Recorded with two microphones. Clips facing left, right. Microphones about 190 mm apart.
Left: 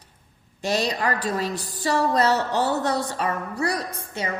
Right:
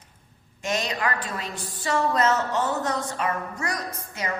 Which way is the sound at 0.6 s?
35° left (ahead or behind).